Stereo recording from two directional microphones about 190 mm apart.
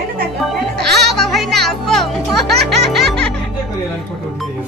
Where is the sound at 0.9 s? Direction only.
Centre (ahead or behind).